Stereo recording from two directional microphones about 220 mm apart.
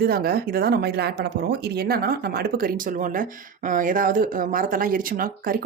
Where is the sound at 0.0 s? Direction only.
45° right (ahead or behind).